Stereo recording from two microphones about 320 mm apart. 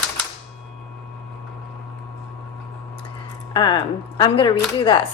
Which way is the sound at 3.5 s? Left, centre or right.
Centre.